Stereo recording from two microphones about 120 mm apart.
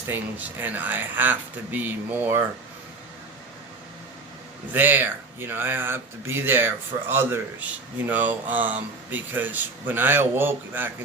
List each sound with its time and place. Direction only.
0.1 s speech: 15° right (ahead or behind)
4.7 s speech: 15° right (ahead or behind)